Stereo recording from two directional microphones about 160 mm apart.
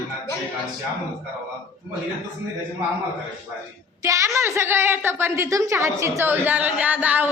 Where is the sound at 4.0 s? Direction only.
20° right (ahead or behind).